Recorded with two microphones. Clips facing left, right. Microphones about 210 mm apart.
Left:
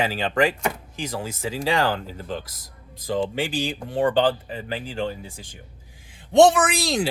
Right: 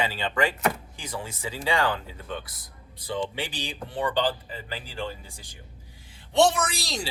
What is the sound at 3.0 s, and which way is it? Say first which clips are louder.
Speech: left 6 dB; 45° left (ahead or behind).